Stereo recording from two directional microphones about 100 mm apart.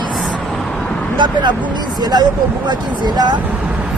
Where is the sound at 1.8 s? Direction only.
45° right (ahead or behind).